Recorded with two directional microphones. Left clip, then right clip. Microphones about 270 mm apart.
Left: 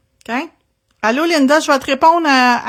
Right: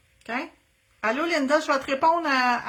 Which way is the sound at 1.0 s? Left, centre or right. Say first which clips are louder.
Left 10 dB; left.